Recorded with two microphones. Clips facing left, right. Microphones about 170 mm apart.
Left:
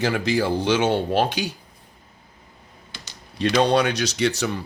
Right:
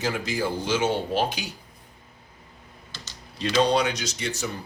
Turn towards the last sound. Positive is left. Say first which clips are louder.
# left 8 dB
turn(degrees=80)